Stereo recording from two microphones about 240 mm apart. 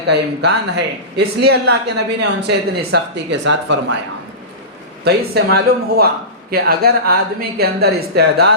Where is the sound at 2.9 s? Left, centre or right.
Right.